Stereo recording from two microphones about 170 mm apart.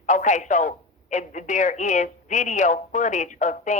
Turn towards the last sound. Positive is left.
turn(degrees=45)  # may be behind; listen again after turning